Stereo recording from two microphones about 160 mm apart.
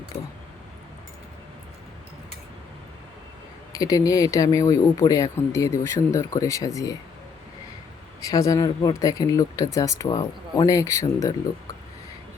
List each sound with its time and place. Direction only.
0.1 s a sound: 35° left (ahead or behind)
3.7 s speech: 20° left (ahead or behind)
8.2 s speech: 20° left (ahead or behind)